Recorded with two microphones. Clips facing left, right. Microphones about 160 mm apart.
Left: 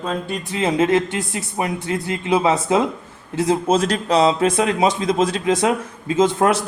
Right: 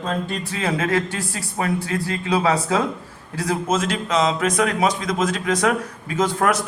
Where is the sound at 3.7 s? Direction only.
35° left (ahead or behind).